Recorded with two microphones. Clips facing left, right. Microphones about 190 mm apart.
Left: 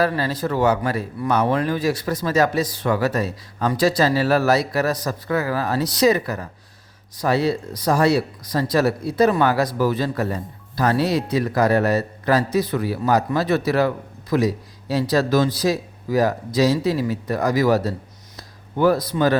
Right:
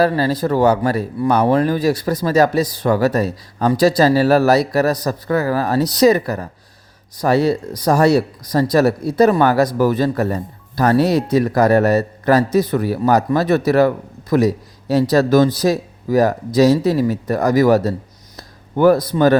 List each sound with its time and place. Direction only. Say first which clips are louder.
0.0 s speech: right 5 dB; 35° right (ahead or behind)